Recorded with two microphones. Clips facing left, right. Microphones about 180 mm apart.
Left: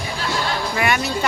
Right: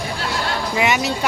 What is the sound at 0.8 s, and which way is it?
Speech, 20° right (ahead or behind).